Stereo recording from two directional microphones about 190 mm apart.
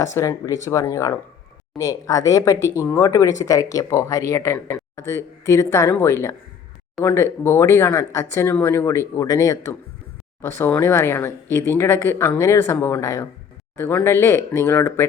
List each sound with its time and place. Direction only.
0.0 s speech: 15° left (ahead or behind)